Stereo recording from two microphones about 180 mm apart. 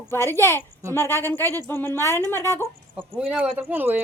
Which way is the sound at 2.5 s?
10° right (ahead or behind).